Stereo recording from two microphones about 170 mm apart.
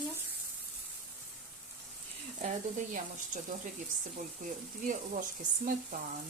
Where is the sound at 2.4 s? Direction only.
45° right (ahead or behind).